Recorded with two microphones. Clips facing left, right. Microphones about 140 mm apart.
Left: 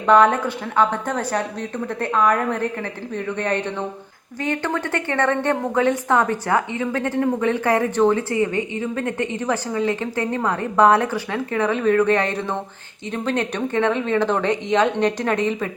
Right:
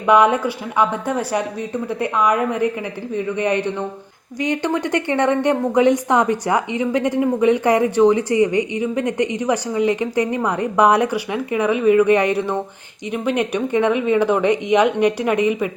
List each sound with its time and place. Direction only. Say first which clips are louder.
0.0 s a woman's voice: right 1 dB; 10° right (ahead or behind)